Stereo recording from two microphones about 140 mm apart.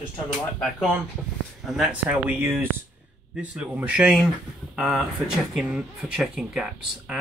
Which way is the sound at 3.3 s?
10° right (ahead or behind).